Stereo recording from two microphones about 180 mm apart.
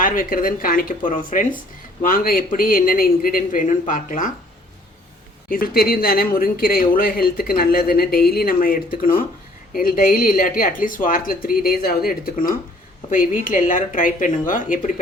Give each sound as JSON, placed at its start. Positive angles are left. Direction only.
{"t": 0.0, "sound": "speech", "side_deg": 50}
{"t": 5.5, "sound": "speech", "side_deg": 55}